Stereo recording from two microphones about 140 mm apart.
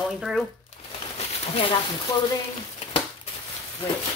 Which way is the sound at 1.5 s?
40° left (ahead or behind).